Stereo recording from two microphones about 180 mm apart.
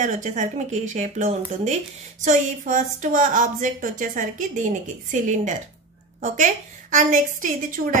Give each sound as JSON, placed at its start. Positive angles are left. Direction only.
{"t": 0.0, "sound": "a woman's voice", "side_deg": -40}